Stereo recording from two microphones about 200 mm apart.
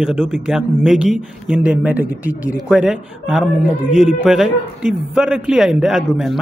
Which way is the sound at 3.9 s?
35° left (ahead or behind).